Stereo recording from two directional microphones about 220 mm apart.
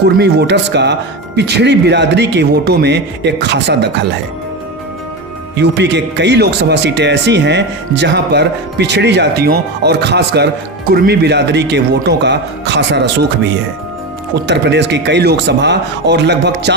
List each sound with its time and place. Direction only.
0.2 s speech: 50° right (ahead or behind)
5.5 s speech: 50° right (ahead or behind)
14.3 s speech: 50° right (ahead or behind)